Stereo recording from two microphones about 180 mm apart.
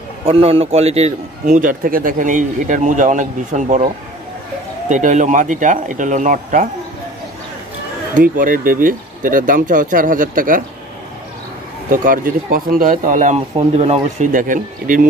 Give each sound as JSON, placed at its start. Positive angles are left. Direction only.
{"t": 0.2, "sound": "a man's voice", "side_deg": -35}
{"t": 8.1, "sound": "a man's voice", "side_deg": -50}
{"t": 11.9, "sound": "a man's voice", "side_deg": -50}
{"t": 13.6, "sound": "speech", "side_deg": -35}